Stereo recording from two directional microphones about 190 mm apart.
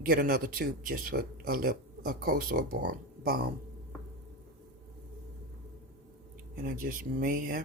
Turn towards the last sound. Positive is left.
turn(degrees=-50)  # may be behind; listen again after turning